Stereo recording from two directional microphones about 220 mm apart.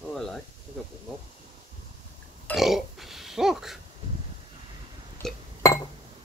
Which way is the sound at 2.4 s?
Centre (ahead or behind).